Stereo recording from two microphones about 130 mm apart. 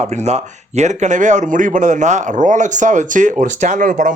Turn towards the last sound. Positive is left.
turn(degrees=-75)  # may be behind; listen again after turning